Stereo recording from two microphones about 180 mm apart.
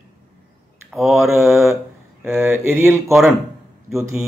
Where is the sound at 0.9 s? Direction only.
Centre (ahead or behind).